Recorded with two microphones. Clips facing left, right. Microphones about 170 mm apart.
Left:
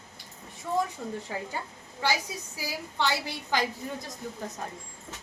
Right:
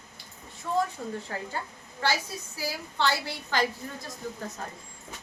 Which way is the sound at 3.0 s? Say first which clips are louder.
Right 1 dB; 15° left (ahead or behind).